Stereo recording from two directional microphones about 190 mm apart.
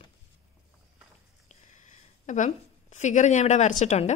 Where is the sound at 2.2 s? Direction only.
40° left (ahead or behind).